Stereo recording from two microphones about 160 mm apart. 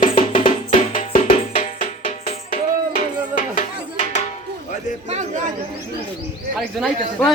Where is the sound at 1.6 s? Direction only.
50° left (ahead or behind).